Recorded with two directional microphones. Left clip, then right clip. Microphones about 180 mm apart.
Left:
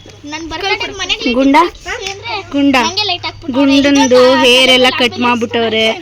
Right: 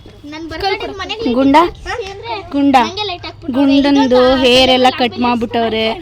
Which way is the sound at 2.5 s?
15° right (ahead or behind).